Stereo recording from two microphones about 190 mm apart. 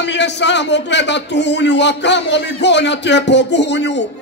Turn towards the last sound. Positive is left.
turn(degrees=65)  # may be behind; listen again after turning